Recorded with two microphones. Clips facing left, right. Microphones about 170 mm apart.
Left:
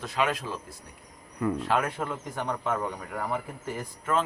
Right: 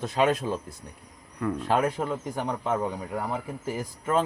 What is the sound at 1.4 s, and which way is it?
Speech, 5° left (ahead or behind).